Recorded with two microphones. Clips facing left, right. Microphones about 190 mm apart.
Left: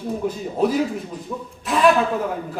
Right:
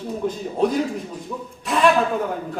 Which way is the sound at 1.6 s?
Centre (ahead or behind).